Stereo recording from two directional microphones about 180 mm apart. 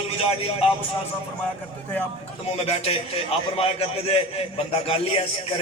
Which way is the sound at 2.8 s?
35° left (ahead or behind).